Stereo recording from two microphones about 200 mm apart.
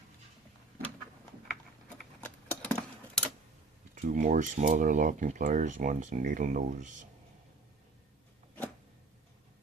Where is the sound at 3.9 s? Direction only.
40° right (ahead or behind).